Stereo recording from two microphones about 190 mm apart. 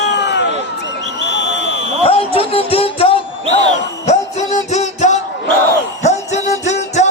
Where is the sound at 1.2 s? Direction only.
70° left (ahead or behind).